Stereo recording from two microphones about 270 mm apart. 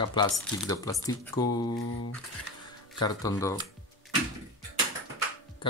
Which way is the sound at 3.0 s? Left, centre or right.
Centre.